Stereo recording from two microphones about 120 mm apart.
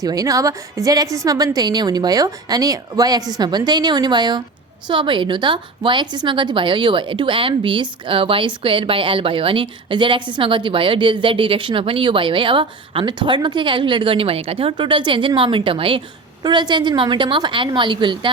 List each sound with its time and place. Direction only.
0.0 s a woman's voice: 30° right (ahead or behind)